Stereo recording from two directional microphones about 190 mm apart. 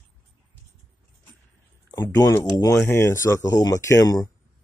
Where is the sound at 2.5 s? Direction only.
15° left (ahead or behind).